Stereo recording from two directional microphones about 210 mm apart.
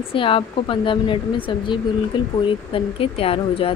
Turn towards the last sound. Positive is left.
turn(degrees=25)  # may be behind; listen again after turning